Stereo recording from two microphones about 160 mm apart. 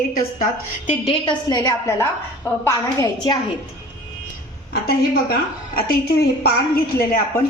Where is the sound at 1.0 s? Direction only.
30° left (ahead or behind).